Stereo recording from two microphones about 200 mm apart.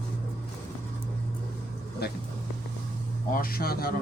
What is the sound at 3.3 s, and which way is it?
Speech, 45° left (ahead or behind).